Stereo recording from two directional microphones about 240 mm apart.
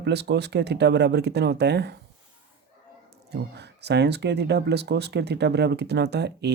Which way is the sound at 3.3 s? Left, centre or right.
Right.